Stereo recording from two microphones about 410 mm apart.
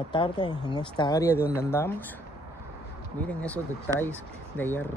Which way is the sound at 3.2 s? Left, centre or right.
Centre.